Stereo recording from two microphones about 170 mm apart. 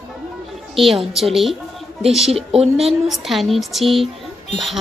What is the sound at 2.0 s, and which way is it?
Speech, 35° right (ahead or behind).